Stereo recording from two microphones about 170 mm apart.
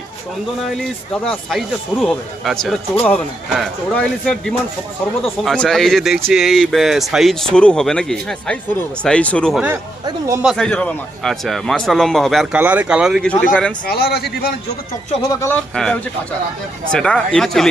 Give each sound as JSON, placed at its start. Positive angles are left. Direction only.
{"t": 0.6, "sound": "speech", "side_deg": 5}
{"t": 10.1, "sound": "speech", "side_deg": -20}
{"t": 10.4, "sound": "speech", "side_deg": 0}
{"t": 13.4, "sound": "speech", "side_deg": 5}
{"t": 13.8, "sound": "speech", "side_deg": 65}
{"t": 15.3, "sound": "speech", "side_deg": 15}